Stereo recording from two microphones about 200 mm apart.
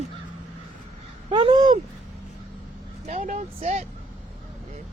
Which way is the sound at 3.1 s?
40° right (ahead or behind).